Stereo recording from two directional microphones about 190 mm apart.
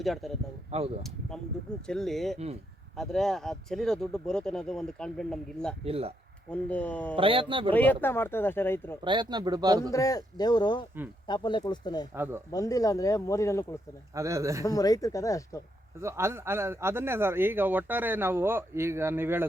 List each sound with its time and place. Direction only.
0.0 s speech: centre (ahead or behind)
0.7 s speech: 30° right (ahead or behind)
1.9 s speech: centre (ahead or behind)
5.8 s speech: 30° right (ahead or behind)
6.5 s speech: 5° left (ahead or behind)
7.2 s a man's voice: 30° right (ahead or behind)
7.7 s speech: 10° left (ahead or behind)
9.0 s a man's voice: 25° right (ahead or behind)
9.9 s speech: 20° left (ahead or behind)
12.1 s speech: 10° right (ahead or behind)
12.5 s speech: 15° left (ahead or behind)
14.1 s speech: 15° right (ahead or behind)
14.6 s speech: 20° left (ahead or behind)
16.0 s speech: 15° right (ahead or behind)